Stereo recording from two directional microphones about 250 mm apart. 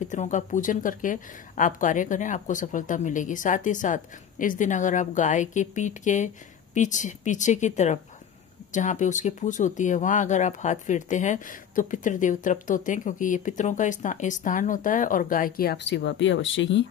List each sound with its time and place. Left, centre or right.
0.0 s a woman's voice: left